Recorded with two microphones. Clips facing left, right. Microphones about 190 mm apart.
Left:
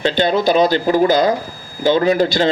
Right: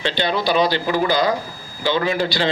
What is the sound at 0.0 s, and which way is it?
A man's voice, 45° left (ahead or behind).